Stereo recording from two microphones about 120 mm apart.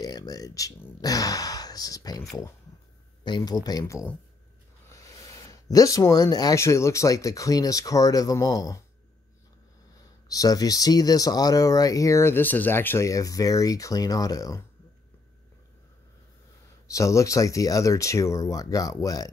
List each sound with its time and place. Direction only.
0.0 s a sound: 35° left (ahead or behind)
3.3 s speech: 35° left (ahead or behind)
10.2 s speech: 30° left (ahead or behind)
16.8 s speech: 25° left (ahead or behind)